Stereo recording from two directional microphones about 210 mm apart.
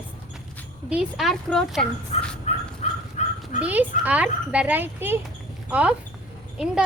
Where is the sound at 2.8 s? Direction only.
30° left (ahead or behind).